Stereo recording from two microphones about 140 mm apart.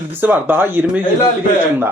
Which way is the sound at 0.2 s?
15° right (ahead or behind).